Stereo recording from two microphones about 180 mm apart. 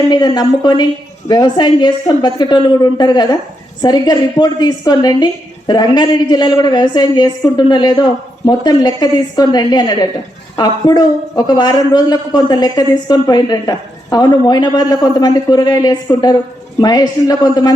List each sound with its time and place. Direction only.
0.1 s speech: 25° left (ahead or behind)